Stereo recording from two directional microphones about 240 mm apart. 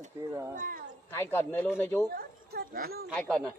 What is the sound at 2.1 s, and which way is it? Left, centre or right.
Speech, right.